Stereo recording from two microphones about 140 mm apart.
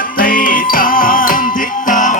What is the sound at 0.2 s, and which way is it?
Music, 90° left.